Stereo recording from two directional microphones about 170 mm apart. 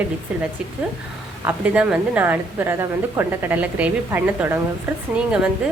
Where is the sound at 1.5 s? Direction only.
5° right (ahead or behind).